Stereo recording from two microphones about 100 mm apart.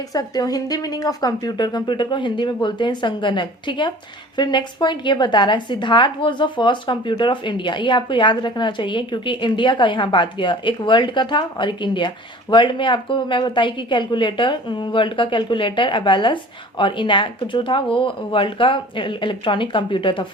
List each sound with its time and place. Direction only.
0.1 s a woman's voice: 40° left (ahead or behind); by 20.2 s 55° left (ahead or behind)